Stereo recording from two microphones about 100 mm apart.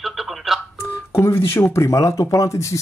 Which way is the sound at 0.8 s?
25° left (ahead or behind).